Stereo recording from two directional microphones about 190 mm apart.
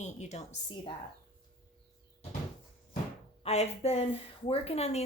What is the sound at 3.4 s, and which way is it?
Speech, 35° left (ahead or behind).